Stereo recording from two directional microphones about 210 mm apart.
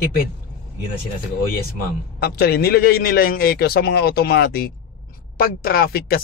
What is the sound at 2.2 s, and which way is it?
Speech, 50° left (ahead or behind).